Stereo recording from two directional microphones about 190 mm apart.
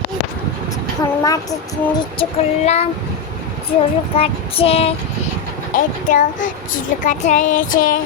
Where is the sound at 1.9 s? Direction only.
30° left (ahead or behind).